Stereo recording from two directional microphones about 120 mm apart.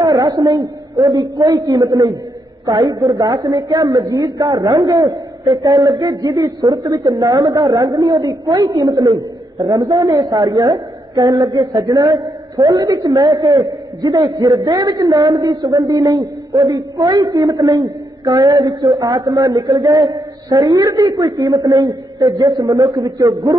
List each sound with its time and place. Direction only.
0.0 s a woman's voice: 30° right (ahead or behind)